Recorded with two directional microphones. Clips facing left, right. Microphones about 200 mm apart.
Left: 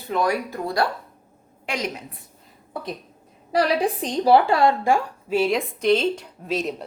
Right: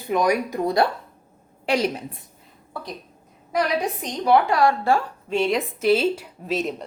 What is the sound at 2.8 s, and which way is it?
Speech, 20° left (ahead or behind).